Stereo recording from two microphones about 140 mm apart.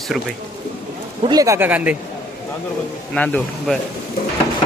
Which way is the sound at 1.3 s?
25° right (ahead or behind).